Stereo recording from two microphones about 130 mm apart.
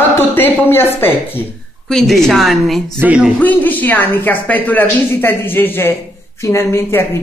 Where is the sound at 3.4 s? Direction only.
15° left (ahead or behind).